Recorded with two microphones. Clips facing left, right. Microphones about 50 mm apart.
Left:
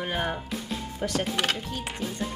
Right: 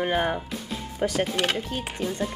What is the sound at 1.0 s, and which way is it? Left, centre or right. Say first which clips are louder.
Speech: right 5 dB; right.